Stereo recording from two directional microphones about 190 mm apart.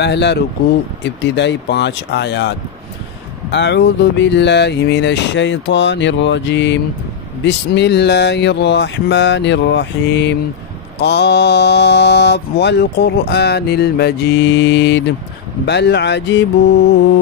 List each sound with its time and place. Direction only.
0.0 s mantra: 65° left (ahead or behind)
3.5 s speech: 65° left (ahead or behind)
11.0 s mantra: 60° left (ahead or behind)